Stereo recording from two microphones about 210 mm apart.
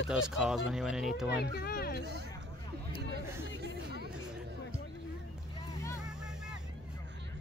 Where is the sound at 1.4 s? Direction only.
45° left (ahead or behind).